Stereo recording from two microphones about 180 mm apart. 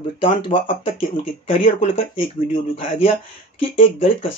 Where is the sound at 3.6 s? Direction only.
30° left (ahead or behind).